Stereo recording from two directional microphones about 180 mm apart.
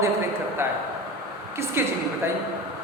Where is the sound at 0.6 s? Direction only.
15° right (ahead or behind).